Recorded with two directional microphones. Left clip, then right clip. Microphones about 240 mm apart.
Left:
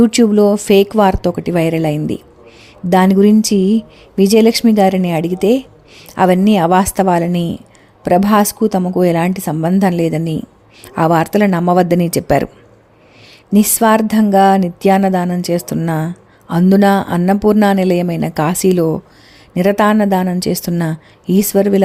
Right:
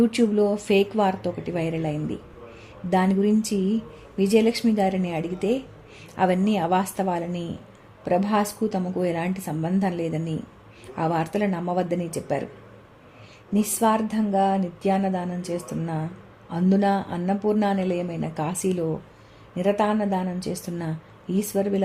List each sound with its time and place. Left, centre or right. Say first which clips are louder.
0.0 s speech: left 10 dB; left
13.5 s speech: left 10 dB; left